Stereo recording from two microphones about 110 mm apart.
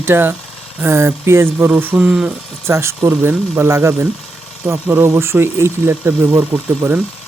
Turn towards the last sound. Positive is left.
turn(degrees=-15)  # may be behind; listen again after turning